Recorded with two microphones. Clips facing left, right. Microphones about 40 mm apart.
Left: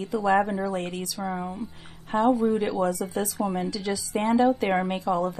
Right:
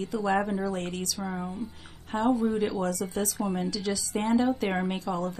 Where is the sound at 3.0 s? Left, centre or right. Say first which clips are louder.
Left 2 dB; centre.